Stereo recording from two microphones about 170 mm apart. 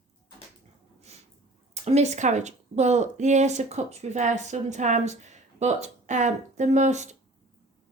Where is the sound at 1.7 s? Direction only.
40° right (ahead or behind).